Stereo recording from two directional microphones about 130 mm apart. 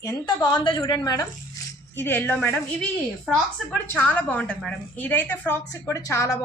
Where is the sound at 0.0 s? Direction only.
30° left (ahead or behind).